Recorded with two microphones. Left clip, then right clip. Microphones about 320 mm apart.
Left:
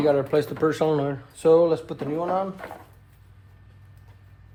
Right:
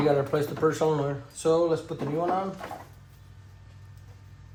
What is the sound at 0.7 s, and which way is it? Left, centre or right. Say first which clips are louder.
Speech: right 1 dB; left.